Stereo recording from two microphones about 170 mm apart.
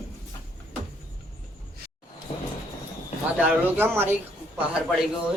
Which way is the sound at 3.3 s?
10° right (ahead or behind).